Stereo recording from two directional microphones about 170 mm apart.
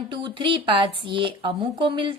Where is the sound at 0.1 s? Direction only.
30° right (ahead or behind).